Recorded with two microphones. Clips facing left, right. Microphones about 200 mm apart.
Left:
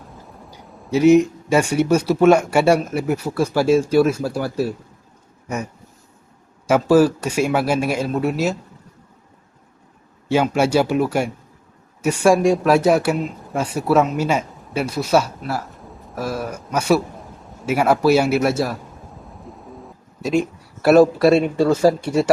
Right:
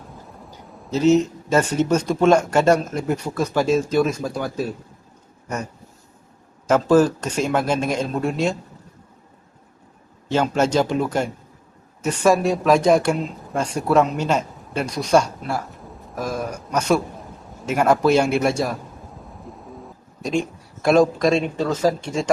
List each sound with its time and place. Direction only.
0.5 s speech: 10° left (ahead or behind)
6.7 s speech: 10° left (ahead or behind)
10.2 s a man's voice: 10° left (ahead or behind)
19.5 s a sound: centre (ahead or behind)
21.5 s speech: 10° left (ahead or behind)